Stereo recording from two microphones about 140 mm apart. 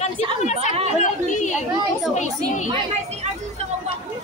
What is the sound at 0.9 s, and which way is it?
Chatter, 60° left (ahead or behind).